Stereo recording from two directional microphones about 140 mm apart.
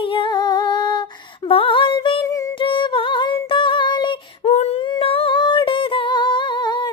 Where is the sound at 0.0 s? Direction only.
35° left (ahead or behind).